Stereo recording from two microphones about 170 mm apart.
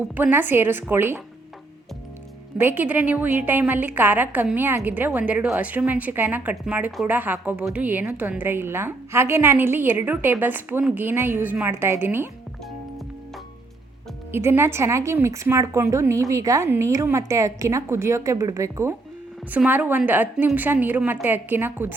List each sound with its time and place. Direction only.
0.1 s a woman's voice: 10° right (ahead or behind)
2.6 s a woman's voice: 10° right (ahead or behind)
14.3 s a woman's voice: 15° right (ahead or behind)